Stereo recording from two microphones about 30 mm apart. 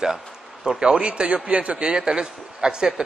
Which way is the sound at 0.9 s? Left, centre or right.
Right.